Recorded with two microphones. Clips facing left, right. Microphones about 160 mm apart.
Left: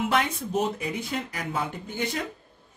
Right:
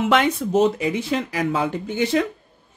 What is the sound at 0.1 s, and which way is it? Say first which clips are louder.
Speech: right 7 dB; 85° right.